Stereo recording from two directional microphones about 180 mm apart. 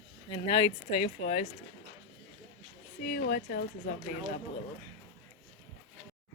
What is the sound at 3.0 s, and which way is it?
Speech, 55° left (ahead or behind).